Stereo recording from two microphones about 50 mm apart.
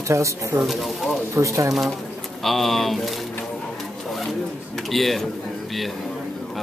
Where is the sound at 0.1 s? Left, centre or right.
Right.